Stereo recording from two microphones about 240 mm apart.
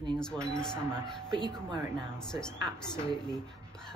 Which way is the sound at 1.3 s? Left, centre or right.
Centre.